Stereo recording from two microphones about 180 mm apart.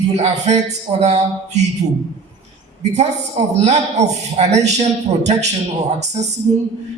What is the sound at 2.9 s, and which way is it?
A man's voice, 35° right (ahead or behind).